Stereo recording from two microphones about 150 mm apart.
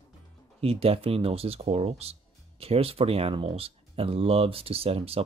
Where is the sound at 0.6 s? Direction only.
40° right (ahead or behind).